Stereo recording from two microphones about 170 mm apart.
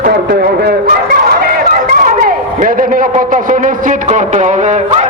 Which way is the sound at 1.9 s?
55° right (ahead or behind).